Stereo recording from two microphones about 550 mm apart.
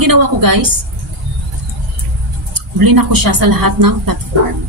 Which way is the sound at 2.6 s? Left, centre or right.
Right.